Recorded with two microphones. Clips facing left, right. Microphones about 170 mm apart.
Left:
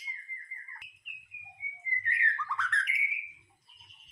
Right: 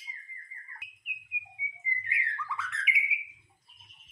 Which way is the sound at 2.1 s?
5° right (ahead or behind).